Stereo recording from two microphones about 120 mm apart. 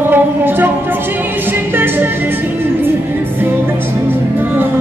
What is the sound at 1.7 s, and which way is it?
Speech, 15° right (ahead or behind).